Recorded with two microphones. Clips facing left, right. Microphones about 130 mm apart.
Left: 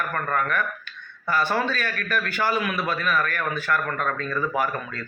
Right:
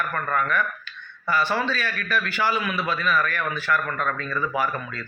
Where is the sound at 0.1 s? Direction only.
45° left (ahead or behind).